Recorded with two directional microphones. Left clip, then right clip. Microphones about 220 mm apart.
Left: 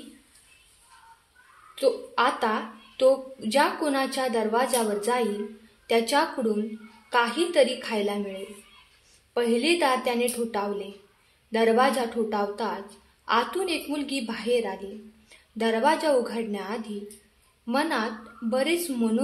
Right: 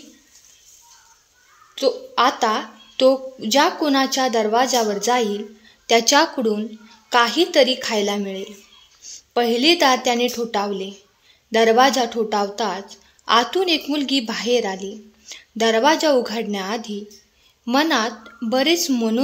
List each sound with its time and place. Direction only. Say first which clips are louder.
1.8 s a woman's voice: right 5 dB; 35° right (ahead or behind)